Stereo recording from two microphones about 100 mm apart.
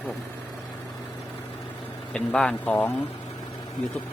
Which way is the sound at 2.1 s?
10° left (ahead or behind).